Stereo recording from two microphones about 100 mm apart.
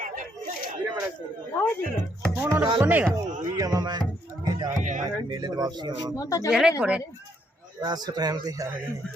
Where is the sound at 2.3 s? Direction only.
25° right (ahead or behind).